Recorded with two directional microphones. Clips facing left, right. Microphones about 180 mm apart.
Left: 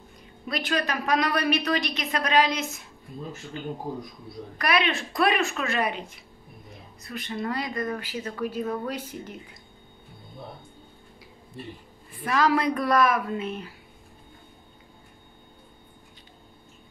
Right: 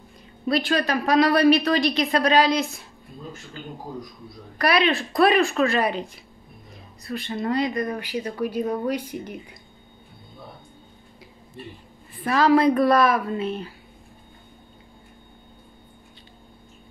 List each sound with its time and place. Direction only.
0.5 s a woman's voice: 30° right (ahead or behind)
4.6 s a woman's voice: 35° right (ahead or behind); by 9.6 s 15° right (ahead or behind)
12.2 s a woman's voice: 30° right (ahead or behind)